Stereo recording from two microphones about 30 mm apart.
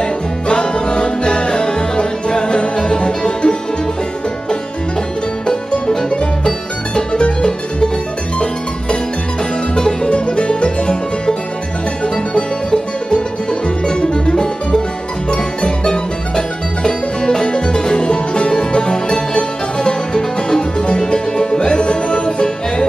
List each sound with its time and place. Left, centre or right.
0.0 s music: left
7.1 s music: left
9.8 s music: left
10.1 s music: left
13.8 s music: left